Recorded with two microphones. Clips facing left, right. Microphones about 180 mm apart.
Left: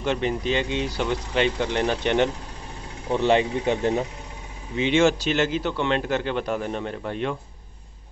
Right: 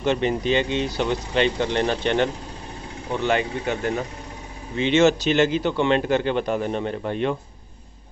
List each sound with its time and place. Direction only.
0.0 s speech: 5° left (ahead or behind)
3.1 s speech: 30° left (ahead or behind)
4.7 s speech: 10° left (ahead or behind)